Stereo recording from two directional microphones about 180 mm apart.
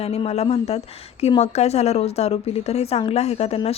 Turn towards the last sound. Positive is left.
turn(degrees=35)  # may be behind; listen again after turning